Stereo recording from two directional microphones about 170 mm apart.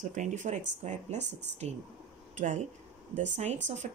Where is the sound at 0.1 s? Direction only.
45° right (ahead or behind).